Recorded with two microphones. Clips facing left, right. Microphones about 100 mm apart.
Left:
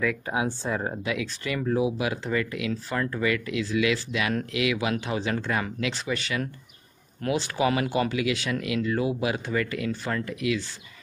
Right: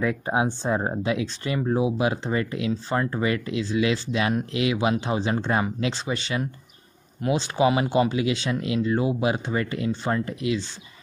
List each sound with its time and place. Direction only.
0.0 s speech: 30° right (ahead or behind)